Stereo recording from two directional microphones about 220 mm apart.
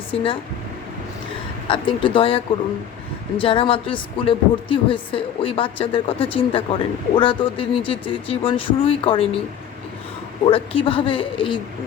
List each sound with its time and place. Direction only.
0.1 s speech: 25° left (ahead or behind)
1.6 s a woman's voice: 25° left (ahead or behind)
10.4 s a woman's voice: 25° left (ahead or behind)